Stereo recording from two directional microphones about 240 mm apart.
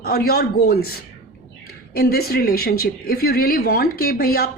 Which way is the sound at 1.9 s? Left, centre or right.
Left.